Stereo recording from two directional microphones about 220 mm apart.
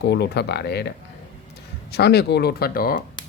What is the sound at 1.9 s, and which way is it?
Speech, 45° left (ahead or behind).